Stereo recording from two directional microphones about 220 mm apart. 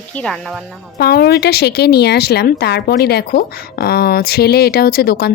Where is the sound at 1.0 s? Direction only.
45° left (ahead or behind).